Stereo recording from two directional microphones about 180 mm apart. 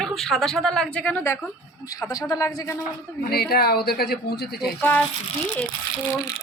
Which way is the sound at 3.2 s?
60° left (ahead or behind).